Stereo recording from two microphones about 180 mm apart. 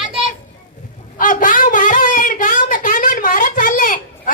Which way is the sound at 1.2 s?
50° left (ahead or behind).